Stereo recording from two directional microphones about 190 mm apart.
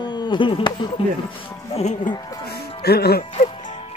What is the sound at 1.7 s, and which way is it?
Speech, 35° left (ahead or behind).